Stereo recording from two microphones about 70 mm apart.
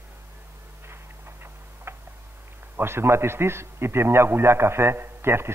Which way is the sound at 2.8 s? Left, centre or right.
Right.